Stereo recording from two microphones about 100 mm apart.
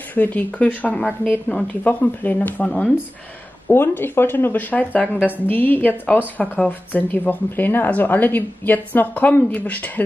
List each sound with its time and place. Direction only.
0.1 s speech: 15° left (ahead or behind)
3.6 s speech: 20° left (ahead or behind)